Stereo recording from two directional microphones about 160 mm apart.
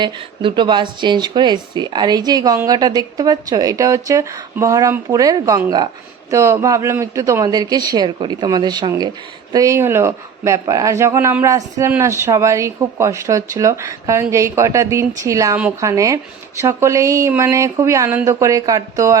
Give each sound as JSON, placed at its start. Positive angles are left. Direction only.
{"t": 0.0, "sound": "speech", "side_deg": -30}